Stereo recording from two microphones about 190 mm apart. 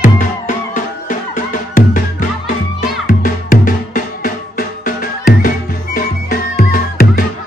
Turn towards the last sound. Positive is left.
turn(degrees=50)  # may be behind; listen again after turning